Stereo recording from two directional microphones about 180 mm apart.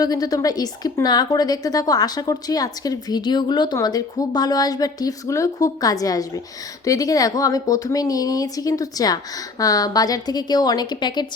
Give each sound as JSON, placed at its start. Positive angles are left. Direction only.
{"t": 0.0, "sound": "a woman's voice", "side_deg": 20}